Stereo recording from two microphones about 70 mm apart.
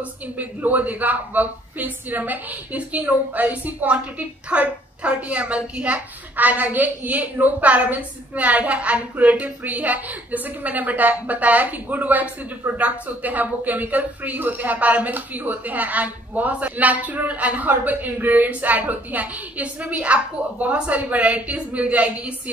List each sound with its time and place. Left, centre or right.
0.4 s speech: right